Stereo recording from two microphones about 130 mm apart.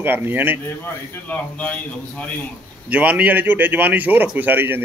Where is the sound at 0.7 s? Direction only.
15° left (ahead or behind).